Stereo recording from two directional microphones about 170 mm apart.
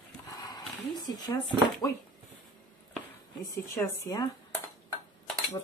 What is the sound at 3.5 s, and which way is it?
Speech, 15° left (ahead or behind).